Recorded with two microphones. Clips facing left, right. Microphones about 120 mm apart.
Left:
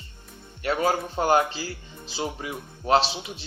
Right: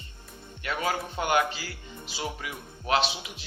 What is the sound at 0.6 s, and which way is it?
Speech, 40° left (ahead or behind).